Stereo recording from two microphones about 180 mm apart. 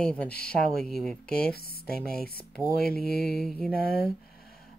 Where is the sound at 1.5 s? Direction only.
60° left (ahead or behind).